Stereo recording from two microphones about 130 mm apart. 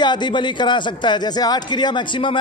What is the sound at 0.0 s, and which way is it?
A man's voice, 35° left (ahead or behind).